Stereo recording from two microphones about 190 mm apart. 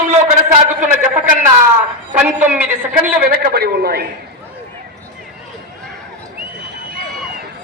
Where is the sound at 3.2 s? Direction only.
55° right (ahead or behind).